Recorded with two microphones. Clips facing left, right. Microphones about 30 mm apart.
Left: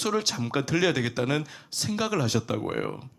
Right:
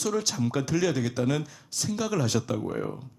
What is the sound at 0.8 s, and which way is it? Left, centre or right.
Speech, left.